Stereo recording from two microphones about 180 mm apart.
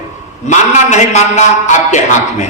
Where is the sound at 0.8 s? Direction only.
40° left (ahead or behind).